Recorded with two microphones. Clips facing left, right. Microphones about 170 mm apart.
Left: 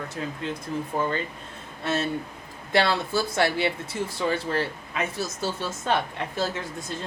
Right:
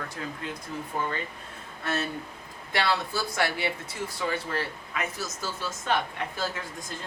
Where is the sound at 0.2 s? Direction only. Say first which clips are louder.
Left 7 dB; 20° left (ahead or behind).